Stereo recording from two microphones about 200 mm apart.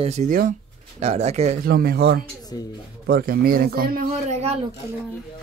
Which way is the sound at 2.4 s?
20° left (ahead or behind).